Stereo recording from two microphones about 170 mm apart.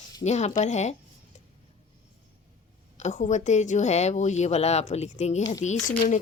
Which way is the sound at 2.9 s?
45° left (ahead or behind).